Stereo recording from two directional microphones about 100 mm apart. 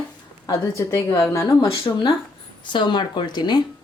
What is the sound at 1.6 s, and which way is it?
Speech, 65° left (ahead or behind).